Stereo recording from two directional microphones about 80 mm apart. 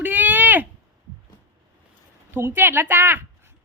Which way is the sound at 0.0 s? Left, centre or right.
Right.